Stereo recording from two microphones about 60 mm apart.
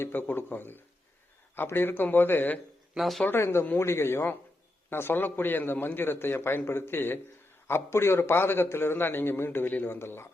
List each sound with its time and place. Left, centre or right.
0.0 s a man's voice: left
2.9 s speech: centre
3.2 s a man's voice: left